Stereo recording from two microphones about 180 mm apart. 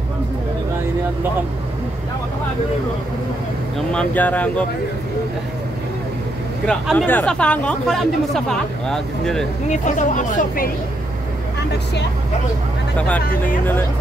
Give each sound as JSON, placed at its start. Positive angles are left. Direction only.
{"t": 3.9, "sound": "speech", "side_deg": 5}
{"t": 6.6, "sound": "speech", "side_deg": 5}
{"t": 9.7, "sound": "speech", "side_deg": 45}